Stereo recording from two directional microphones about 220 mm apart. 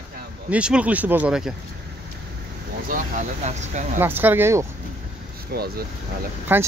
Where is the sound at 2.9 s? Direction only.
35° right (ahead or behind).